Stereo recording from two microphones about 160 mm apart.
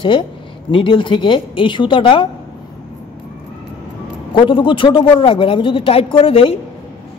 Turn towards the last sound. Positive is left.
turn(degrees=35)  # may be behind; listen again after turning